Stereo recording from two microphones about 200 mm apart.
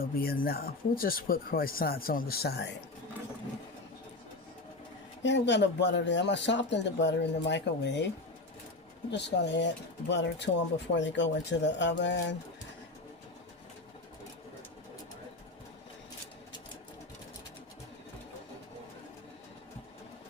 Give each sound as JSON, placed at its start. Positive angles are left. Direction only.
{"t": 0.0, "sound": "speech", "side_deg": 50}
{"t": 5.2, "sound": "speech", "side_deg": 60}
{"t": 9.1, "sound": "speech", "side_deg": 60}